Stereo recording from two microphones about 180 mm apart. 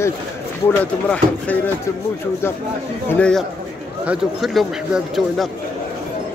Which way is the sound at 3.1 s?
5° left (ahead or behind).